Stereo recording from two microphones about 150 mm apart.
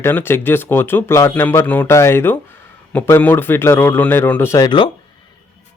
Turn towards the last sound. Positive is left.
turn(degrees=30)  # may be behind; listen again after turning